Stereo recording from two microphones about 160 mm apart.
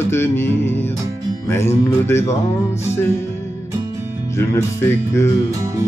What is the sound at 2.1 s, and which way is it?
Music, 15° left (ahead or behind).